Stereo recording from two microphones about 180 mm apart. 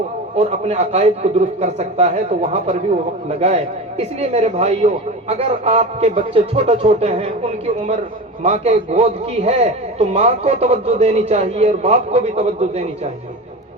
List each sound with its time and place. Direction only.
0.3 s a man's voice: 35° right (ahead or behind)